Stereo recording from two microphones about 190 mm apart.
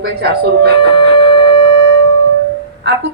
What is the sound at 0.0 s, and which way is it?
Speech, 60° right (ahead or behind).